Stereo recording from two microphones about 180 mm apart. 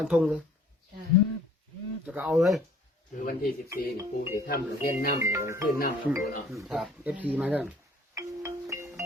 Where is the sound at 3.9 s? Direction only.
15° right (ahead or behind).